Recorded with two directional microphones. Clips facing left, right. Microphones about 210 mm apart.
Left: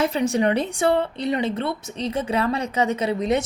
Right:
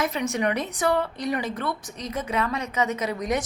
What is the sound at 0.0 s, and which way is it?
A woman's voice, 30° left (ahead or behind).